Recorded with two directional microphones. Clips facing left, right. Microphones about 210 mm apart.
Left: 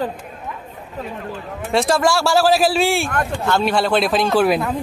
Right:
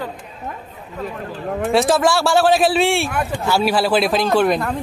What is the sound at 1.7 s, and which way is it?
Speech, centre (ahead or behind).